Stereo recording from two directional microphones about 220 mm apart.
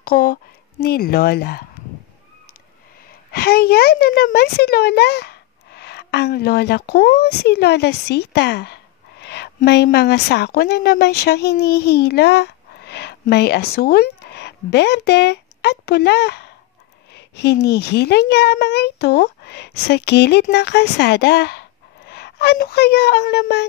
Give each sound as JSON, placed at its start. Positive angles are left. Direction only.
{"t": 0.0, "sound": "speech", "side_deg": 45}
{"t": 3.3, "sound": "a woman's voice", "side_deg": 45}